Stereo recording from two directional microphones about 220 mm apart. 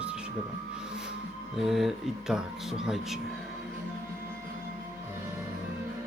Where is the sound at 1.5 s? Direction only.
Centre (ahead or behind).